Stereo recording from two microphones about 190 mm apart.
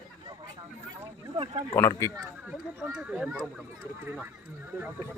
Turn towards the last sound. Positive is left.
turn(degrees=-10)  # may be behind; listen again after turning